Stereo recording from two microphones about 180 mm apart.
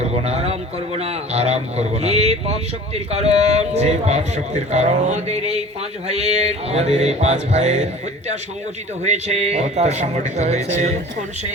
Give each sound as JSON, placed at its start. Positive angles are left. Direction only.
{"t": 0.0, "sound": "a sound", "side_deg": -35}
{"t": 0.9, "sound": "speech", "side_deg": -35}
{"t": 9.0, "sound": "speech", "side_deg": -35}